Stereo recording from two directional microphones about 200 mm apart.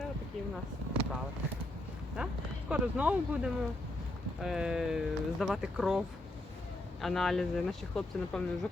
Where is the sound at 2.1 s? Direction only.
5° right (ahead or behind).